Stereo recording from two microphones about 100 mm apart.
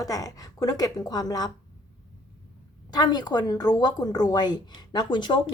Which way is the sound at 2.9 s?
45° left (ahead or behind).